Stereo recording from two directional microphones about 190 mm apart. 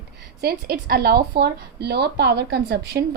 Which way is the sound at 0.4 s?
55° right (ahead or behind).